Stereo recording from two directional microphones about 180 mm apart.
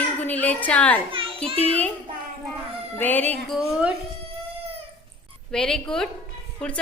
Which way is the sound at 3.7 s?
5° right (ahead or behind).